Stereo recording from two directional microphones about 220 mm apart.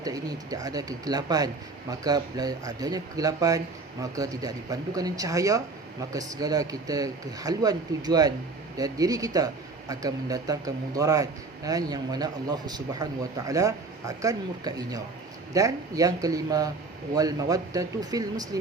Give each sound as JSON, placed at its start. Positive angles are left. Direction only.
{"t": 0.0, "sound": "a man's voice", "side_deg": -15}